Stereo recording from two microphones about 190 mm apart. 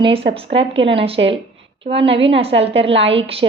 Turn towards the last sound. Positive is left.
turn(degrees=-30)  # may be behind; listen again after turning